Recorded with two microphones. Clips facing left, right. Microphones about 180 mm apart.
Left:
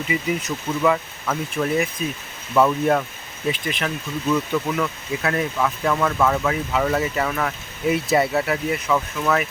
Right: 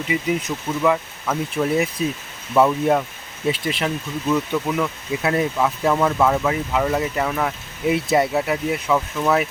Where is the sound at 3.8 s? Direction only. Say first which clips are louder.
Even; 10° right (ahead or behind).